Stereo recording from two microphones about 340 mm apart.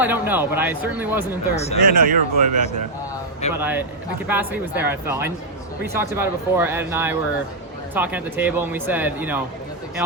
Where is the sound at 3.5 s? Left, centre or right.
Centre.